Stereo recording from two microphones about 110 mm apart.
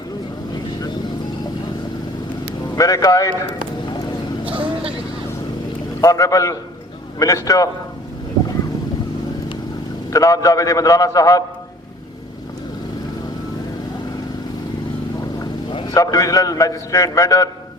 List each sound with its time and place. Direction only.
2.7 s a man's voice: 30° left (ahead or behind)
6.0 s a man's voice: 30° left (ahead or behind)
10.1 s a man's voice: 30° left (ahead or behind)
15.9 s a man's voice: 30° left (ahead or behind)